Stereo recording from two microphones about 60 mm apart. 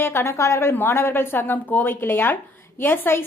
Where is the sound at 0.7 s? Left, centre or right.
Left.